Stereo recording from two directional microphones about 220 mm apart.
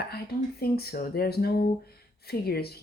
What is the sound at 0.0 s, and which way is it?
Speech, 45° left (ahead or behind).